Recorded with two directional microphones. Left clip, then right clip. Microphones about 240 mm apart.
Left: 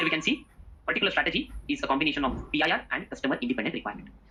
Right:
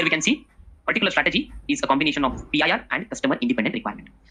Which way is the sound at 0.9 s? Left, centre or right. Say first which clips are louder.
Right 5 dB; right.